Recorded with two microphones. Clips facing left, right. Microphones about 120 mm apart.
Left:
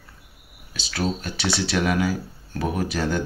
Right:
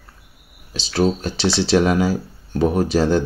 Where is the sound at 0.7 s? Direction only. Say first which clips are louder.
Right 8 dB; 30° right (ahead or behind).